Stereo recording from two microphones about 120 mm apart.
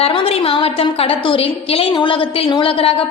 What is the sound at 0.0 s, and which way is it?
A woman's voice, 55° left (ahead or behind).